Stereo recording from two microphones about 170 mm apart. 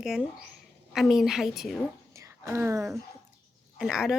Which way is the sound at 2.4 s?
15° right (ahead or behind).